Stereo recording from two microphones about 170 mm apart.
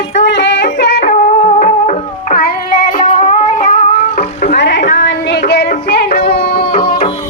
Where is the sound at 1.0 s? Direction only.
50° left (ahead or behind).